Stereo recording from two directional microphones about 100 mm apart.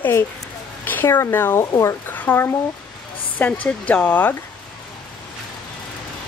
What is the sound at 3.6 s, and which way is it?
Speech, 15° left (ahead or behind).